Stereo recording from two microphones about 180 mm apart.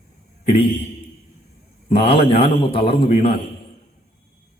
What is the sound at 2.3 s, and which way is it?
A woman's voice, 30° left (ahead or behind).